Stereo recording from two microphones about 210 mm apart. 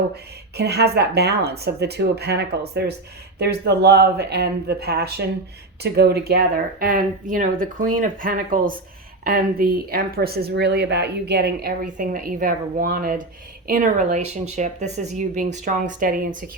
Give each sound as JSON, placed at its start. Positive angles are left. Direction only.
{"t": 0.5, "sound": "speech", "side_deg": -50}